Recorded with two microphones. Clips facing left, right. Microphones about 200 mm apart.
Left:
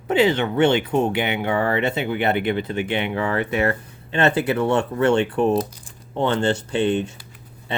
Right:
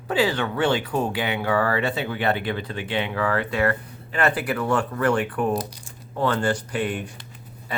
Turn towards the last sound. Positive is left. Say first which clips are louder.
# left 6 dB
turn(degrees=25)  # may be behind; listen again after turning